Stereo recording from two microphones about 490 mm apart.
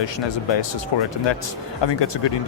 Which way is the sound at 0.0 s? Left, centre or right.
Left.